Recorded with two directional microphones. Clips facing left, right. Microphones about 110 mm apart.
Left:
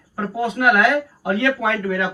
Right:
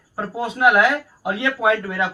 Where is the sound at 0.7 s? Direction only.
15° right (ahead or behind).